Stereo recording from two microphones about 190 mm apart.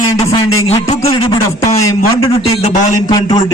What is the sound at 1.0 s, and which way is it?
Speech, 30° left (ahead or behind).